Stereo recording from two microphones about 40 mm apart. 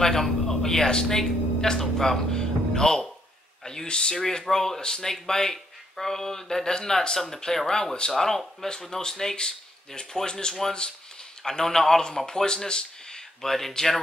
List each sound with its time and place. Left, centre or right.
0.0 s a man's voice: centre
13.5 s speech: centre